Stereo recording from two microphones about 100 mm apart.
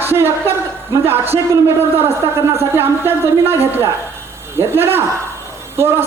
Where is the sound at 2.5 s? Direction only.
25° right (ahead or behind).